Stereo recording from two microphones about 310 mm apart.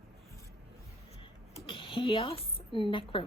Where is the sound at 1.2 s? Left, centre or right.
Centre.